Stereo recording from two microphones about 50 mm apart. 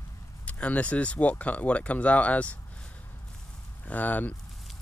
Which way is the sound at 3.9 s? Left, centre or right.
Left.